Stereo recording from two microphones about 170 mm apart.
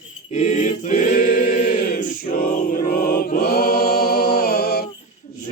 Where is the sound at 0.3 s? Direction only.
45° left (ahead or behind).